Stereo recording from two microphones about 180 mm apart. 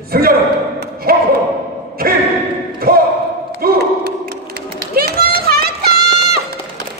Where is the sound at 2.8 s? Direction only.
55° right (ahead or behind).